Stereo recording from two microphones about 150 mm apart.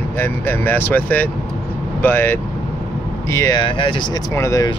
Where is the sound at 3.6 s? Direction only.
30° left (ahead or behind).